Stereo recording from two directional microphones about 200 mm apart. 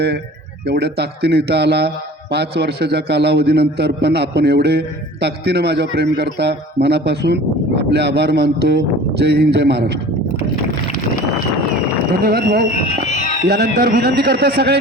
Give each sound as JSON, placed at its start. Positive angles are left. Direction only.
{"t": 0.6, "sound": "a man's voice", "side_deg": -55}
{"t": 12.2, "sound": "a man's voice", "side_deg": -50}